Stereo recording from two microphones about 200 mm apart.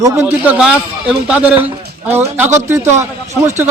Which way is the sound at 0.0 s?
15° right (ahead or behind).